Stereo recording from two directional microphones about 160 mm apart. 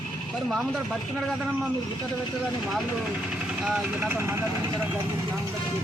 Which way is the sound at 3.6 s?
5° right (ahead or behind).